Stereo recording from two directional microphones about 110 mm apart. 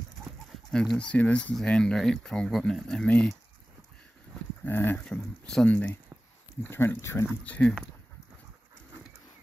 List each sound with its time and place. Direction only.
0.7 s speech: 5° left (ahead or behind)
4.6 s speech: 20° left (ahead or behind)
6.6 s speech: 20° left (ahead or behind)
7.4 s speech: 15° left (ahead or behind)